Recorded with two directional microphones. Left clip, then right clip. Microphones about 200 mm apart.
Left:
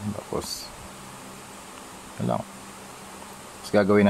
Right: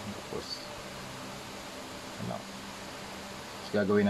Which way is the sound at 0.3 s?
60° left (ahead or behind).